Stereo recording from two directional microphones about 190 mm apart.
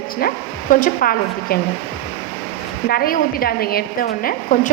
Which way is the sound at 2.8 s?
50° left (ahead or behind).